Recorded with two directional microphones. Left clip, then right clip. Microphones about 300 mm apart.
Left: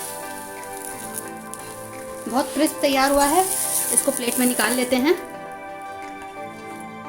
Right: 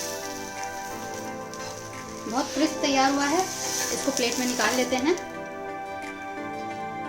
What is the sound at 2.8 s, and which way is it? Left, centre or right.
Speech, left.